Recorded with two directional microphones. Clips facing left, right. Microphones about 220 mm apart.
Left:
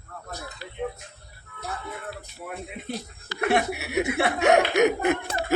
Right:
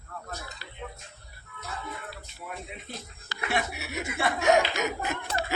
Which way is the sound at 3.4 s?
60° left (ahead or behind).